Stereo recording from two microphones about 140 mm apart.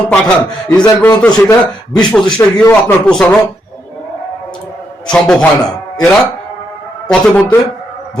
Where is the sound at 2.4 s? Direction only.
20° left (ahead or behind).